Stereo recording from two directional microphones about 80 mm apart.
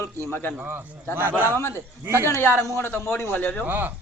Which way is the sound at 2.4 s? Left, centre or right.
Left.